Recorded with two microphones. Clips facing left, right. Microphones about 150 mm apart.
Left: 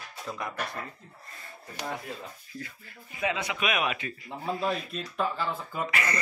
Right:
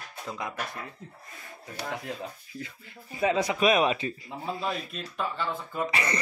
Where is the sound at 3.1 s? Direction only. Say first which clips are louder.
Right 5 dB; 35° right (ahead or behind).